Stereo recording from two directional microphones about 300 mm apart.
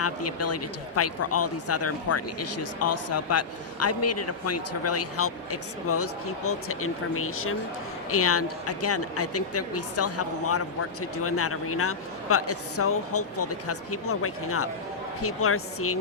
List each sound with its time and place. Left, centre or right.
0.0 s speech: left